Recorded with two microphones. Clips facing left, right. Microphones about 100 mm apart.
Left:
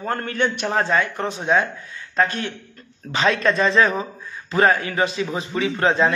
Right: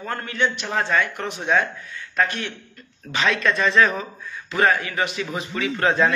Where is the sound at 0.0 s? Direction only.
40° left (ahead or behind).